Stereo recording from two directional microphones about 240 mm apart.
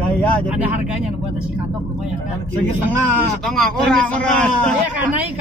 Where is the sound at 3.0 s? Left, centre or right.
Centre.